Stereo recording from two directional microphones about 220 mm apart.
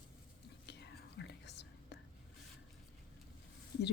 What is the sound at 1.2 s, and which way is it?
Whispering, 50° left (ahead or behind).